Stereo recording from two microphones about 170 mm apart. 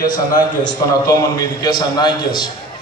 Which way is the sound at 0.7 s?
20° left (ahead or behind).